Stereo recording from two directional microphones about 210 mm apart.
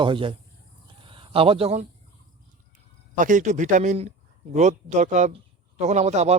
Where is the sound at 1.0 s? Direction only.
25° right (ahead or behind).